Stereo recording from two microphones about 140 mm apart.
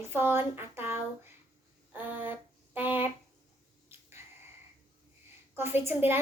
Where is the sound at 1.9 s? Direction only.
15° right (ahead or behind).